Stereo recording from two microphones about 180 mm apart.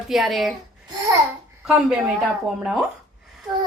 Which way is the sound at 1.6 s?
5° right (ahead or behind).